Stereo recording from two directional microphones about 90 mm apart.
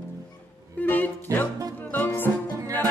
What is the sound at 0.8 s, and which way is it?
Music, 20° left (ahead or behind).